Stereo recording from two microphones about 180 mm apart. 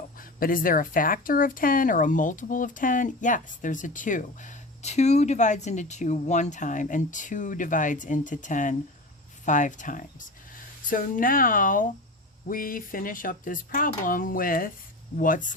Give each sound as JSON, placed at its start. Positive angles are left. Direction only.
{"t": 0.2, "sound": "speech", "side_deg": 50}